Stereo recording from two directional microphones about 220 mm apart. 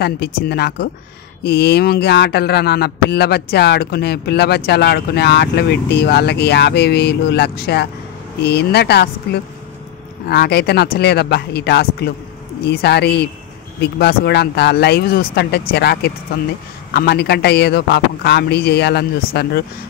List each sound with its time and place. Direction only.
0.0 s speech: 45° left (ahead or behind)